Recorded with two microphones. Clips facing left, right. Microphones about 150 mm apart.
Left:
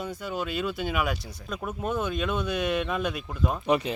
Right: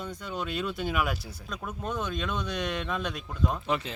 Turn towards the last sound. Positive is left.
turn(degrees=15)  # may be behind; listen again after turning